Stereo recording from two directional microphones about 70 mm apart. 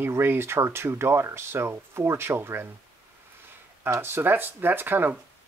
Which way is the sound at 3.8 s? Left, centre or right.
Right.